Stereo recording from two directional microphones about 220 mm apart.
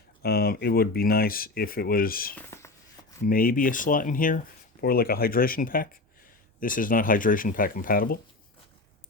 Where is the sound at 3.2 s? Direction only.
40° left (ahead or behind).